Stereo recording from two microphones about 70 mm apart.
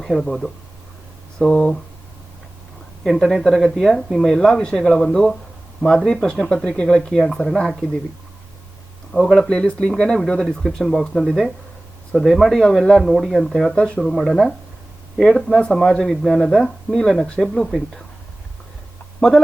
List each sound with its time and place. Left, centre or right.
0.2 s speech: centre
3.0 s speech: centre
9.1 s speech: centre
10.4 s speech: centre
13.7 s speech: centre
14.0 s speech: centre